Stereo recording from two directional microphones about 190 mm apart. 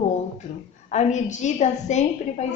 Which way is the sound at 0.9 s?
40° left (ahead or behind).